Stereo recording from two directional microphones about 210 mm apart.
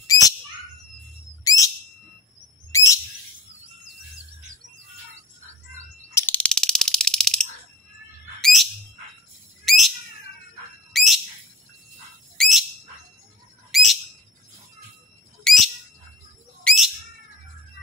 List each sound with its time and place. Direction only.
0.0 s bird: 15° left (ahead or behind)
1.4 s bird: 15° left (ahead or behind)
2.7 s bird: 15° left (ahead or behind)
6.1 s a sound: 10° left (ahead or behind)
8.4 s bird: centre (ahead or behind)
9.7 s bird: centre (ahead or behind)
12.4 s bird: centre (ahead or behind)
13.7 s bird: centre (ahead or behind)
15.4 s bird: centre (ahead or behind)